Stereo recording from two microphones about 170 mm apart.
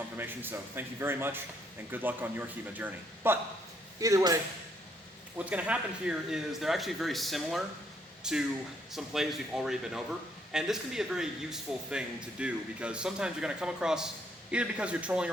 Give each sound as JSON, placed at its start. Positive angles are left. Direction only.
{"t": 0.2, "sound": "a man's voice", "side_deg": -10}
{"t": 5.5, "sound": "a man's voice", "side_deg": -10}